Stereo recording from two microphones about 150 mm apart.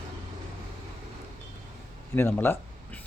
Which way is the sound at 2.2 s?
15° left (ahead or behind).